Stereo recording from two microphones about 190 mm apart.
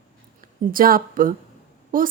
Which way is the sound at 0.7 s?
50° right (ahead or behind).